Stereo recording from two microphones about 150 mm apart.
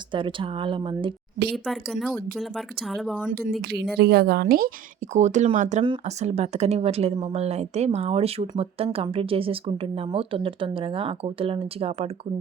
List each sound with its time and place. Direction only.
0.1 s speech: 35° right (ahead or behind)
1.5 s speech: centre (ahead or behind)
3.6 s speech: 90° right
5.1 s speech: 55° right (ahead or behind)